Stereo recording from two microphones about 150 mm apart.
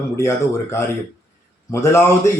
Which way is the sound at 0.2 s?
20° left (ahead or behind).